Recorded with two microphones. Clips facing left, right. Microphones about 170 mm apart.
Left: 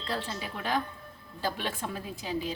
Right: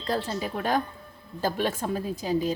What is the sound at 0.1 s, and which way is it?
A woman's voice, 40° right (ahead or behind).